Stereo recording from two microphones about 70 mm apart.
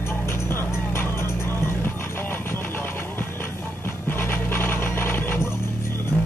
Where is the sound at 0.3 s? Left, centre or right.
Left.